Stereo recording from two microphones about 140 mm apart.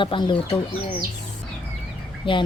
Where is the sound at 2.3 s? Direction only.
40° left (ahead or behind).